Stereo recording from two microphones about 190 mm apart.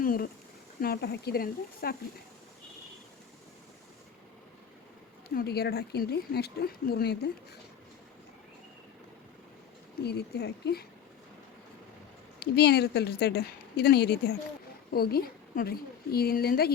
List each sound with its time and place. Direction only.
0.0 s speech: 50° left (ahead or behind)
5.3 s speech: 55° left (ahead or behind)
10.0 s speech: 60° left (ahead or behind)
12.4 s speech: 60° left (ahead or behind)